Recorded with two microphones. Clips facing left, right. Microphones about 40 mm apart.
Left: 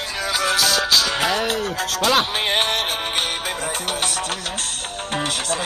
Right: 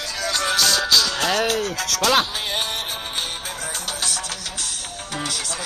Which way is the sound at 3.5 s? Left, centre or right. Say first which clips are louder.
Left 5 dB; left.